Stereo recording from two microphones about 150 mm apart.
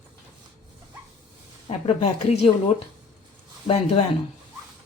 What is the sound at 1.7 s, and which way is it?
Speech, 45° left (ahead or behind).